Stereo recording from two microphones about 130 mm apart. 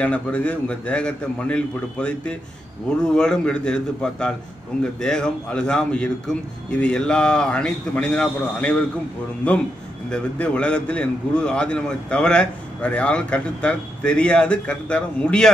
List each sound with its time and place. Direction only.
0.0 s a man's voice: 10° left (ahead or behind)